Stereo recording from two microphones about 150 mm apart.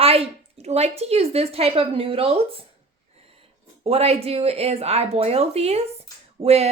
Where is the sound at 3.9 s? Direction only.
45° right (ahead or behind).